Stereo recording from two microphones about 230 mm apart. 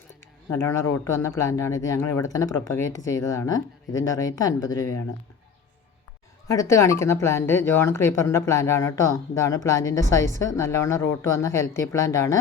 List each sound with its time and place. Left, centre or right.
1.2 s speech: centre
6.5 s speech: centre